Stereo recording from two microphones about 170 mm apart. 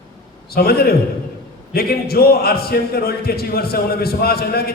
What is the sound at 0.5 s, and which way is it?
A man's voice, 65° left (ahead or behind).